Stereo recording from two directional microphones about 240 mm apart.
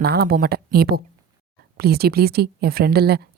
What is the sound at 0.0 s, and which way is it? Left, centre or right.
A woman's voice, right.